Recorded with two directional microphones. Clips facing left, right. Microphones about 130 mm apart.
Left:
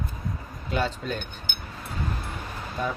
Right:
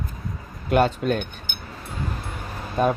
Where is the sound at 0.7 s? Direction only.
60° right (ahead or behind).